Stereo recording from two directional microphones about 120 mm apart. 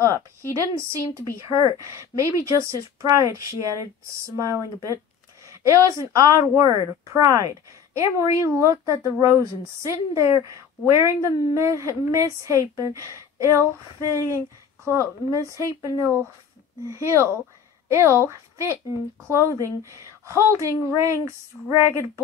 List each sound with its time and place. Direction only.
0.0 s speech: 25° right (ahead or behind)
14.9 s speech: 25° right (ahead or behind)